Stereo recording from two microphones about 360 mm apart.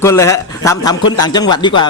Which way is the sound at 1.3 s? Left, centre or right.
Centre.